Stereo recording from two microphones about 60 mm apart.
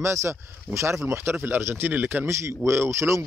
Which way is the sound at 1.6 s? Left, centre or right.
Right.